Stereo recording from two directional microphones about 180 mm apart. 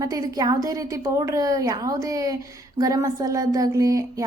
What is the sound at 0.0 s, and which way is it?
A woman's voice, 20° right (ahead or behind).